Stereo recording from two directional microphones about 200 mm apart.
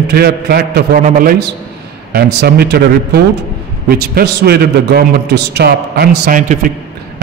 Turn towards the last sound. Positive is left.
turn(degrees=-45)  # may be behind; listen again after turning